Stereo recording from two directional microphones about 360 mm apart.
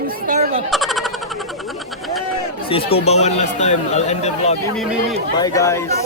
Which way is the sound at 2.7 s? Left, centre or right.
Centre.